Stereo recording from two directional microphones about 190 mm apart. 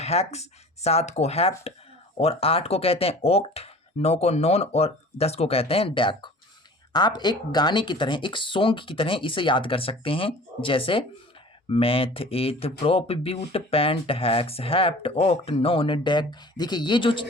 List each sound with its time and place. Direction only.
0.0 s speech: 35° left (ahead or behind)